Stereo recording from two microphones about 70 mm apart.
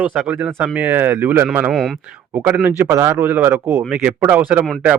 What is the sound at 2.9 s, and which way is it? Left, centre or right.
Speech, right.